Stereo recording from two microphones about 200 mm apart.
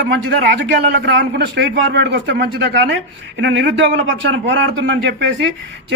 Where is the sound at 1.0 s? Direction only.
60° right (ahead or behind).